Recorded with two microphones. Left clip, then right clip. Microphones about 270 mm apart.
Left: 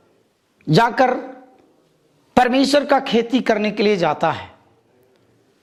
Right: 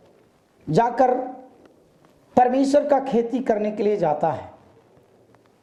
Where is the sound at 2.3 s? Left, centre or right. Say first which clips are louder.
Left 2 dB; left.